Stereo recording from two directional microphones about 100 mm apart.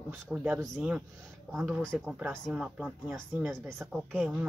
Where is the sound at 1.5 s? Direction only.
5° right (ahead or behind).